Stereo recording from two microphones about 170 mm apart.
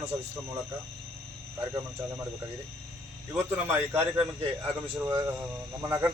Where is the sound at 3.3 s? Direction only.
10° right (ahead or behind).